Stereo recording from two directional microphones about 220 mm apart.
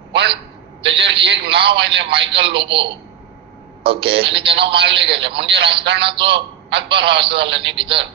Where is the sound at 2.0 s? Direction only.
25° right (ahead or behind).